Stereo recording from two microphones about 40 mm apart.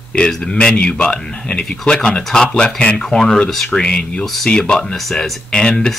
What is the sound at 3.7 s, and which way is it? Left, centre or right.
Speech, left.